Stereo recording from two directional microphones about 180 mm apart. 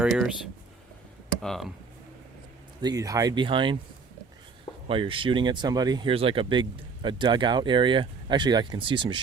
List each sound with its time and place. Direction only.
0.0 s speech: 5° right (ahead or behind)
1.4 s speech: centre (ahead or behind)
2.8 s speech: 20° right (ahead or behind)
4.9 s speech: 30° right (ahead or behind)